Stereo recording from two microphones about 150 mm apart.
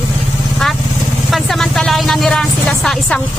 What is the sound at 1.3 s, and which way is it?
Speech, centre (ahead or behind).